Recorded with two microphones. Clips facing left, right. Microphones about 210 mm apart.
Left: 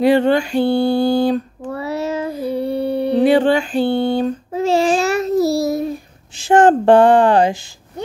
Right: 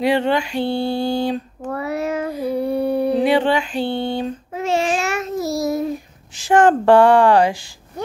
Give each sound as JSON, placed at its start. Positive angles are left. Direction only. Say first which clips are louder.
{"t": 0.0, "sound": "mantra", "louder": "left 5 dB", "side_deg": 45}
{"t": 1.7, "sound": "child singing", "louder": "even", "side_deg": 30}
{"t": 3.3, "sound": "mantra", "louder": "left 4 dB", "side_deg": 45}
{"t": 4.5, "sound": "child singing", "louder": "left 4 dB", "side_deg": 35}
{"t": 6.3, "sound": "speech", "louder": "left 2 dB", "side_deg": 25}